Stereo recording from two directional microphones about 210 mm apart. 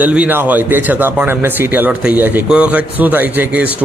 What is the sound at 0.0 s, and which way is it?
A man's voice, 5° right (ahead or behind).